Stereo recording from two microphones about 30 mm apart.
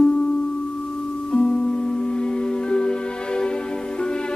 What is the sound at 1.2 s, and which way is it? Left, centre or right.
Music, left.